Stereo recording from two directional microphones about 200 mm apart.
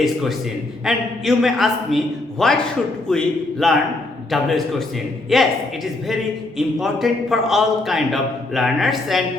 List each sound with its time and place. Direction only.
0.0 s a man's voice: centre (ahead or behind)